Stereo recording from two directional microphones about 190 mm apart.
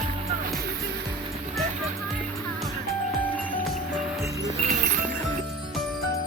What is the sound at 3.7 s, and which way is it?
Music, centre (ahead or behind).